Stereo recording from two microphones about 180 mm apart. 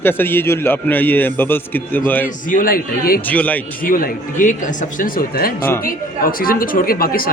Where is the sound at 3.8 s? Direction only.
50° left (ahead or behind).